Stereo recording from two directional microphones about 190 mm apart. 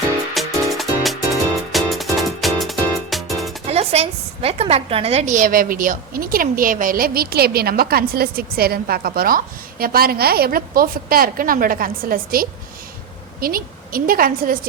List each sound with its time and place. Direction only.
0.3 s music: centre (ahead or behind)
3.7 s a woman's voice: 35° right (ahead or behind)